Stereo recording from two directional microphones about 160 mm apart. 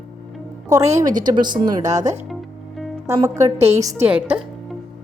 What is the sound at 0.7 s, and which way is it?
A woman's voice, 20° right (ahead or behind).